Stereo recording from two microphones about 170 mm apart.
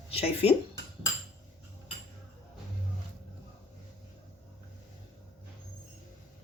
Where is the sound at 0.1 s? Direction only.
35° left (ahead or behind).